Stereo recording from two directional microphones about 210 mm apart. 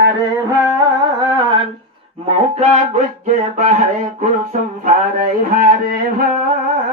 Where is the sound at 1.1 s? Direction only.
20° right (ahead or behind).